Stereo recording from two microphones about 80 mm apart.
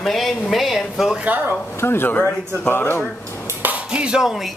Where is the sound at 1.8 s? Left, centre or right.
Left.